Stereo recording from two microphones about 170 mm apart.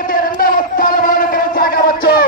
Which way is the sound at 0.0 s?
55° left (ahead or behind).